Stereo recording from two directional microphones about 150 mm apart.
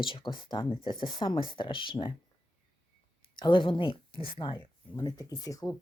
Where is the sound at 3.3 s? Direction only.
30° left (ahead or behind).